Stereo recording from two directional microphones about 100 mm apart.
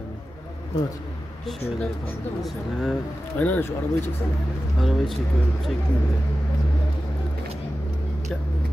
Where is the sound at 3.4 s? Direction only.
15° left (ahead or behind).